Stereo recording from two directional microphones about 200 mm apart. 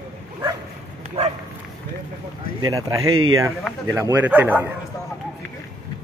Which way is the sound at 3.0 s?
90° right.